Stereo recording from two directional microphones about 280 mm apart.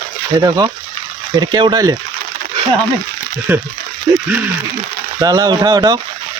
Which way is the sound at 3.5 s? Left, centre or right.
Centre.